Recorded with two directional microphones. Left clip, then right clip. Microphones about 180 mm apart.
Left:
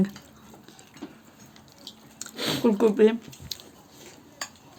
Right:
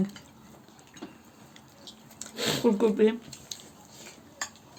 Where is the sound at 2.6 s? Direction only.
25° left (ahead or behind).